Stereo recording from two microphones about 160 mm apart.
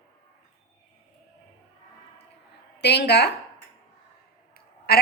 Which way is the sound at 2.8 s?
90° left.